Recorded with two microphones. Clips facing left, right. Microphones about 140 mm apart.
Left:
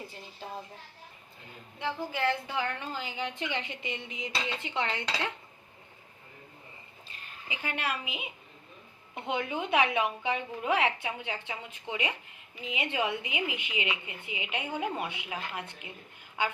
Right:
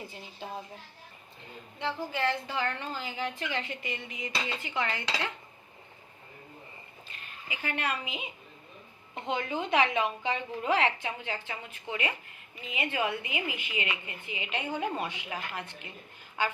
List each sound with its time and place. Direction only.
1.8 s a woman's voice: 15° left (ahead or behind)
7.4 s a woman's voice: 15° left (ahead or behind)